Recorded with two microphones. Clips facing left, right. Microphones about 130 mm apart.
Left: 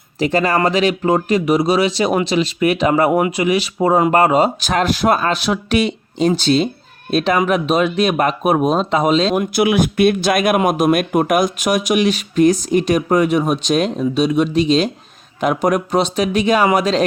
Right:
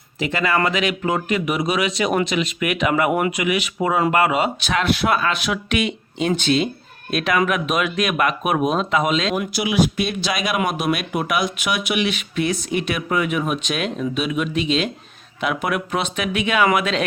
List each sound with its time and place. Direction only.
0.2 s speech: 40° left (ahead or behind)
9.5 s speech: 55° left (ahead or behind); by 17.0 s 35° left (ahead or behind)